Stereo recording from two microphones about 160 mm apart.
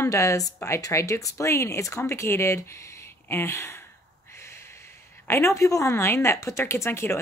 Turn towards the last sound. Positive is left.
turn(degrees=15)  # may be behind; listen again after turning